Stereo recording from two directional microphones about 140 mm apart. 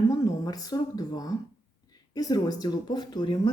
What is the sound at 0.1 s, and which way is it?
Speech, 25° left (ahead or behind).